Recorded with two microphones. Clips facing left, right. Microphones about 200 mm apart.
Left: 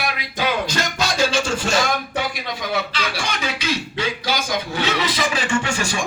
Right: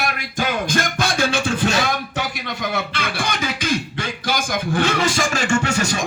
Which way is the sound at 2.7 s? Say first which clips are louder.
Left 3 dB; 55° right (ahead or behind).